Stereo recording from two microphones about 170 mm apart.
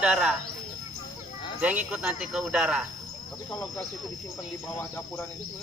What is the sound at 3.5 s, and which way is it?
Speech, 10° left (ahead or behind).